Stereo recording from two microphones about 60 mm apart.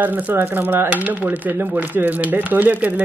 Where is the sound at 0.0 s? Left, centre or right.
Right.